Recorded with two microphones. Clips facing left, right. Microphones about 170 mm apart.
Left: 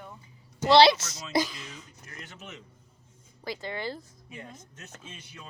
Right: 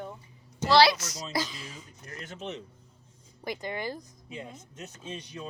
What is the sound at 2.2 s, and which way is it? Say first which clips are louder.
Speech: right 7 dB; 35° right (ahead or behind).